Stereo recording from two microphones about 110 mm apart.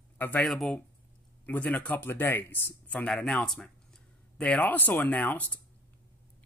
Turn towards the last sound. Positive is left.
turn(degrees=15)  # may be behind; listen again after turning